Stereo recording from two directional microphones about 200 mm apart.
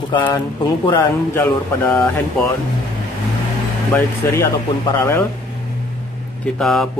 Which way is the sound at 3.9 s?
10° left (ahead or behind).